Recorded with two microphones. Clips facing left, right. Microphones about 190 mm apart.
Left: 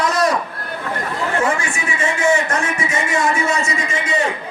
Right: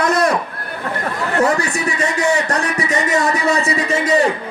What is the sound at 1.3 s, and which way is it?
A man's voice, 40° right (ahead or behind).